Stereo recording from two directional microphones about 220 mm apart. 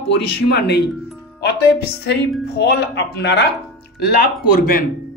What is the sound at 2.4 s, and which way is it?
Speech, 50° left (ahead or behind).